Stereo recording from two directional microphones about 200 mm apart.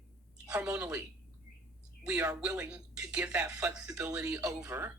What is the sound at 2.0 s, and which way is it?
A woman's voice, 10° right (ahead or behind).